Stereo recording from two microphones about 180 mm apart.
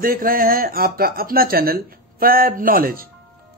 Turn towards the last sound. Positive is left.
turn(degrees=-55)  # may be behind; listen again after turning